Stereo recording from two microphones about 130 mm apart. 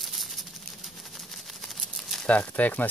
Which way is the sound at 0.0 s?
Centre (ahead or behind).